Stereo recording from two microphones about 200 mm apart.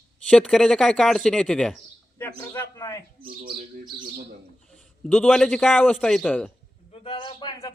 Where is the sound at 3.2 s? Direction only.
45° right (ahead or behind).